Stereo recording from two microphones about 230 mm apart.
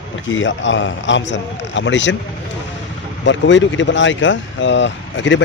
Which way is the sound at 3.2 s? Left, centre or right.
Left.